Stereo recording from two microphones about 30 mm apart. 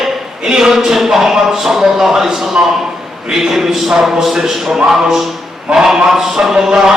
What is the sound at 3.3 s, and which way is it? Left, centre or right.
Speech, centre.